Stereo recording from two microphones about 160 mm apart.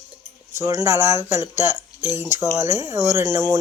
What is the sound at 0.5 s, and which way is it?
Speech, 20° right (ahead or behind).